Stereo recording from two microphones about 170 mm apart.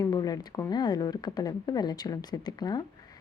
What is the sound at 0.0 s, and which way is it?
A woman's voice, 20° left (ahead or behind).